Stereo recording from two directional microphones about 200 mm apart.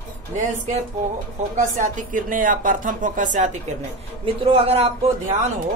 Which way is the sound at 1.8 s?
40° right (ahead or behind).